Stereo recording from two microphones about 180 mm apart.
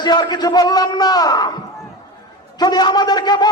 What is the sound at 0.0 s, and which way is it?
A man's voice, 25° left (ahead or behind).